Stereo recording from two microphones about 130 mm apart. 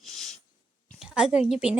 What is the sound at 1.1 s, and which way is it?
Speech, 10° right (ahead or behind).